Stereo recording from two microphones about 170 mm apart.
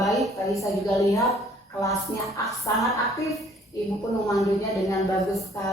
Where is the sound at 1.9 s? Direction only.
Centre (ahead or behind).